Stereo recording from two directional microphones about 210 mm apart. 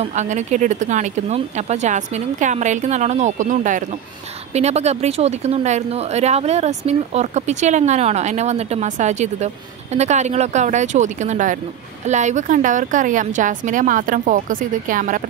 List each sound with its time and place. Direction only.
0.0 s speech: 35° right (ahead or behind)